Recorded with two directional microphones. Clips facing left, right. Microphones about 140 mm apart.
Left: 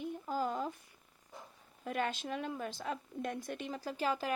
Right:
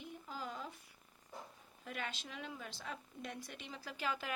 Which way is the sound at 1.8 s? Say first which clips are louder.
Left 9 dB; 50° left (ahead or behind).